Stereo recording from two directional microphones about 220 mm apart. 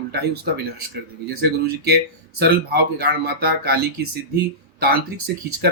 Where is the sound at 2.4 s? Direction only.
45° right (ahead or behind).